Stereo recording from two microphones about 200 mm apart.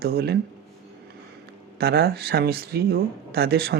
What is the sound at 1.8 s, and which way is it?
Speech, 50° right (ahead or behind).